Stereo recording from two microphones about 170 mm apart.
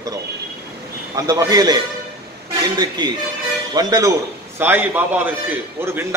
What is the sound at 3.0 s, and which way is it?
A man's voice, 25° right (ahead or behind).